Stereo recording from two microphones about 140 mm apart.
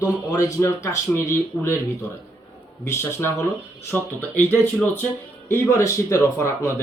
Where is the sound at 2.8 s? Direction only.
20° left (ahead or behind).